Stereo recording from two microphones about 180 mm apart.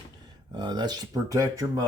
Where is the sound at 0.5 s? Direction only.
25° right (ahead or behind).